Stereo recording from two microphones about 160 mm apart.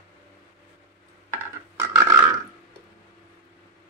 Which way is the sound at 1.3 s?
20° right (ahead or behind).